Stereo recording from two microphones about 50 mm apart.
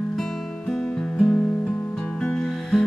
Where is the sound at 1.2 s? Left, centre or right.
Left.